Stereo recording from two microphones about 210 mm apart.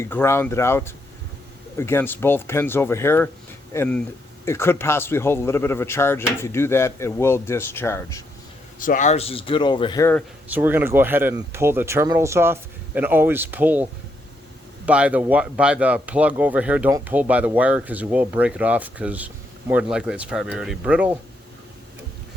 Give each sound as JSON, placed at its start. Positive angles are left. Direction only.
{"t": 0.0, "sound": "speech", "side_deg": 10}
{"t": 8.8, "sound": "speech", "side_deg": 40}
{"t": 10.5, "sound": "speech", "side_deg": -10}
{"t": 14.8, "sound": "speech", "side_deg": -5}